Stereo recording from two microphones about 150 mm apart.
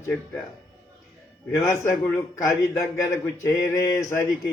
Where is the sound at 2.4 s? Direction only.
20° left (ahead or behind).